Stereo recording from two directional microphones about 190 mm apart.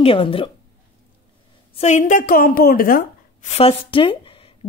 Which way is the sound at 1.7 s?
35° left (ahead or behind).